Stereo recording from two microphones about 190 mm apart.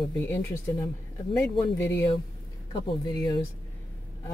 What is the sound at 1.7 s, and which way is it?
Speech, 10° left (ahead or behind).